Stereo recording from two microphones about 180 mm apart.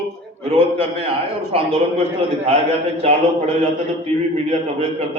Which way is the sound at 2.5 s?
30° right (ahead or behind).